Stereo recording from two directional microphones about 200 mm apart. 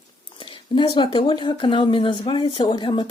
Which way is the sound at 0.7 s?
25° left (ahead or behind).